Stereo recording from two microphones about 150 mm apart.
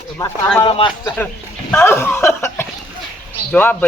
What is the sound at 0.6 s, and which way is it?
Speech, 35° left (ahead or behind).